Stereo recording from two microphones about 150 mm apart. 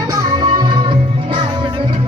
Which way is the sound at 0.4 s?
30° right (ahead or behind).